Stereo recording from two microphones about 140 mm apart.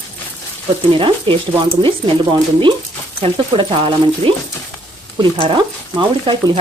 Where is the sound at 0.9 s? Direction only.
40° right (ahead or behind).